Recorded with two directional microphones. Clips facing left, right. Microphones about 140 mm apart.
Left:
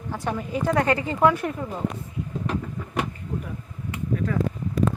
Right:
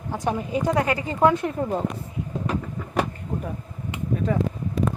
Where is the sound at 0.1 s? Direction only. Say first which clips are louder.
Right 3 dB; 15° right (ahead or behind).